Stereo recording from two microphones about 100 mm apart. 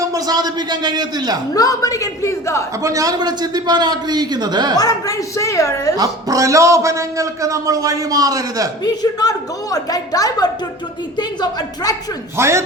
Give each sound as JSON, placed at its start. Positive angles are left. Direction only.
{"t": 0.0, "sound": "a man's voice", "side_deg": -35}
{"t": 1.5, "sound": "a woman's voice", "side_deg": 35}
{"t": 2.8, "sound": "a man's voice", "side_deg": -35}
{"t": 4.8, "sound": "a woman's voice", "side_deg": 35}
{"t": 6.0, "sound": "a man's voice", "side_deg": -35}
{"t": 8.8, "sound": "a woman's voice", "side_deg": 40}
{"t": 12.4, "sound": "speech", "side_deg": -25}